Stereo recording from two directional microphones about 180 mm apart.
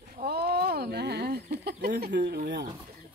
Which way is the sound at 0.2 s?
60° right (ahead or behind).